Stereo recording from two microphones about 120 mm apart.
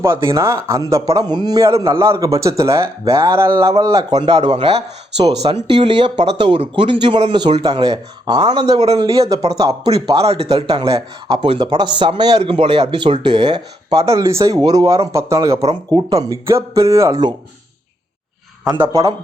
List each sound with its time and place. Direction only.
0.3 s speech: 25° right (ahead or behind)
4.5 s speech: 55° right (ahead or behind)
5.7 s speech: 45° right (ahead or behind)
10.2 s speech: 55° right (ahead or behind)
10.8 s speech: 30° right (ahead or behind)
11.3 s speech: 45° right (ahead or behind)
12.4 s speech: 55° right (ahead or behind); by 17.3 s 35° right (ahead or behind)